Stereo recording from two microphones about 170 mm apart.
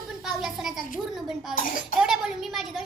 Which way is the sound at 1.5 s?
55° left (ahead or behind).